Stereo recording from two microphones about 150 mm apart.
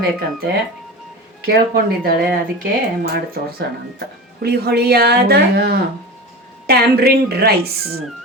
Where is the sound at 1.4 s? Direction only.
90° right.